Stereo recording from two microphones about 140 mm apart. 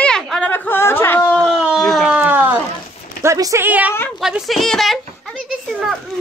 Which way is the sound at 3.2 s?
20° right (ahead or behind).